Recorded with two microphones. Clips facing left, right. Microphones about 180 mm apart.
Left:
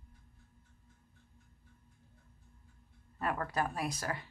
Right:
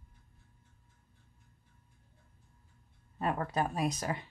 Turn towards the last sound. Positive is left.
turn(degrees=-20)  # may be behind; listen again after turning